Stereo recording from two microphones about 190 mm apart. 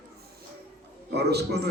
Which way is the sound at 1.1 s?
60° right (ahead or behind).